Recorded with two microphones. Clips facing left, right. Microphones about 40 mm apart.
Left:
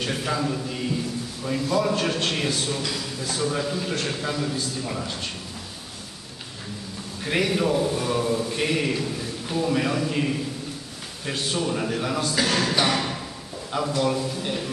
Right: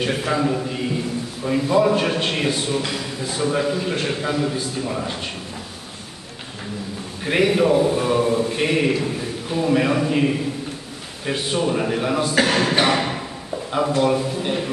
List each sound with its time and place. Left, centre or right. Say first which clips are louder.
0.0 s a man's voice: right 5 dB; centre
7.2 s a man's voice: right 6 dB; centre